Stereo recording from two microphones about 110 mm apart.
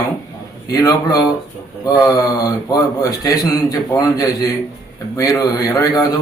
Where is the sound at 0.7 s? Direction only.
30° left (ahead or behind).